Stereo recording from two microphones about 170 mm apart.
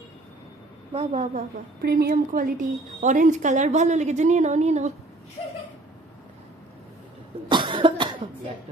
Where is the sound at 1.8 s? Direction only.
65° right (ahead or behind); by 4.9 s 40° right (ahead or behind).